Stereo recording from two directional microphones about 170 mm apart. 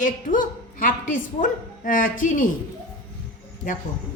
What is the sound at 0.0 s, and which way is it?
A woman's voice, 50° left (ahead or behind).